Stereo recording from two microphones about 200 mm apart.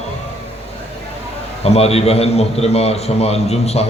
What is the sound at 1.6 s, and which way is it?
A man's voice, 30° left (ahead or behind).